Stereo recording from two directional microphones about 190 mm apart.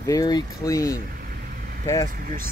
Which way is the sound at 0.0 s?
20° left (ahead or behind).